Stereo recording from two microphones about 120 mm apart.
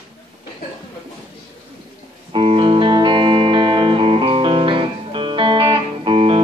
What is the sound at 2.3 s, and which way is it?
Music, 45° right (ahead or behind).